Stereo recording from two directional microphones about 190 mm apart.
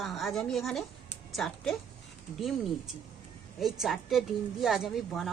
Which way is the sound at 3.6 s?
Centre (ahead or behind).